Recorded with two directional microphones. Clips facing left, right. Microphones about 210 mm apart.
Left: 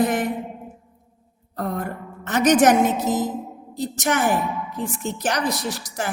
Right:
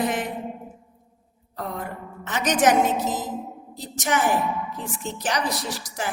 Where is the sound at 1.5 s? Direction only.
50° left (ahead or behind).